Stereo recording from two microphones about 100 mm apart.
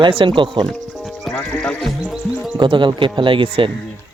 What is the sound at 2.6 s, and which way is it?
Speech, 55° right (ahead or behind).